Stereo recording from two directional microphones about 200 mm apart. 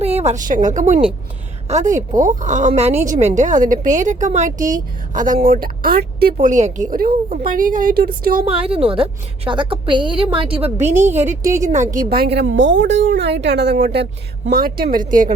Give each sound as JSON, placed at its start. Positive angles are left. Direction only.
{"t": 0.0, "sound": "a woman's voice", "side_deg": -30}
{"t": 6.3, "sound": "a woman's voice", "side_deg": -35}
{"t": 8.4, "sound": "a woman's voice", "side_deg": -30}
{"t": 12.5, "sound": "a woman's voice", "side_deg": -70}